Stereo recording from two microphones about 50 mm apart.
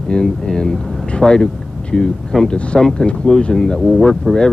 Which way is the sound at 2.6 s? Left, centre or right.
Left.